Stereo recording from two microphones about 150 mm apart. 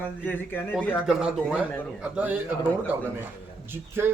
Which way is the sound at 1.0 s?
5° right (ahead or behind).